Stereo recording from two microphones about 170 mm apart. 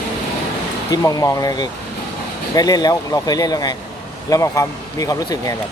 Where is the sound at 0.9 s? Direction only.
20° left (ahead or behind).